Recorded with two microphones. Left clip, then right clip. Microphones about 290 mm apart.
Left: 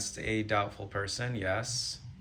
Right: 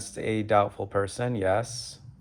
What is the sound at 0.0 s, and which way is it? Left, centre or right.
Speech, centre.